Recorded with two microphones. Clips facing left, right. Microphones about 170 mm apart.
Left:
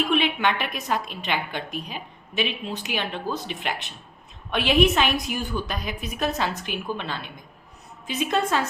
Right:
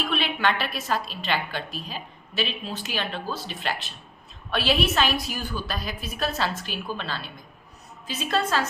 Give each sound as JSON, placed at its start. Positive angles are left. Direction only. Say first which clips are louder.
{"t": 0.1, "sound": "a woman's voice", "louder": "left 3 dB", "side_deg": 15}